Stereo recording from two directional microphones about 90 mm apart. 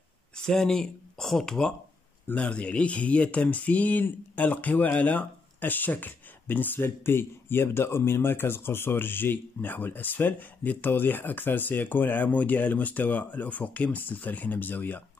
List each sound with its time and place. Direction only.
0.4 s speech: 5° left (ahead or behind)